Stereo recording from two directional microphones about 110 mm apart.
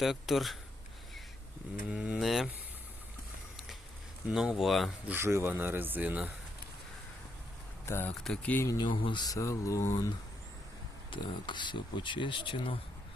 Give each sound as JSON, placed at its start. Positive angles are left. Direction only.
{"t": 0.0, "sound": "speech", "side_deg": 0}
{"t": 1.9, "sound": "speech", "side_deg": -5}
{"t": 4.3, "sound": "speech", "side_deg": -5}
{"t": 5.0, "sound": "speech", "side_deg": -20}
{"t": 7.9, "sound": "speech", "side_deg": 20}
{"t": 8.2, "sound": "speech", "side_deg": 5}
{"t": 8.8, "sound": "speech", "side_deg": 45}
{"t": 11.1, "sound": "speech", "side_deg": 45}